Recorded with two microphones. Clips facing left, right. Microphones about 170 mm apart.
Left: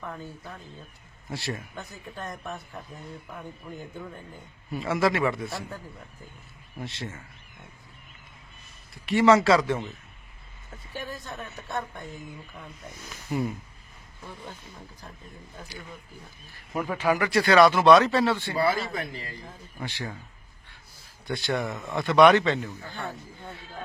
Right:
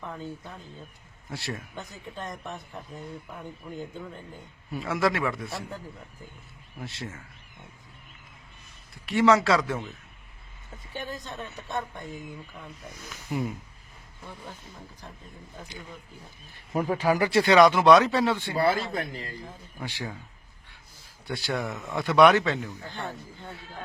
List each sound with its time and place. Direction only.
1.3 s a man's voice: centre (ahead or behind)
1.7 s speech: 15° right (ahead or behind)
2.4 s a man's voice: centre (ahead or behind)
4.7 s a man's voice: centre (ahead or behind)
6.7 s a man's voice: centre (ahead or behind)
9.0 s a man's voice: centre (ahead or behind)
10.9 s speech: 15° right (ahead or behind)
13.1 s a man's voice: centre (ahead or behind)
16.7 s speech: 35° right (ahead or behind); by 18.5 s 10° right (ahead or behind)
18.5 s a man's voice: 50° right (ahead or behind)
19.5 s speech: 10° right (ahead or behind)
21.2 s a man's voice: 10° right (ahead or behind)
22.7 s speech: 15° left (ahead or behind)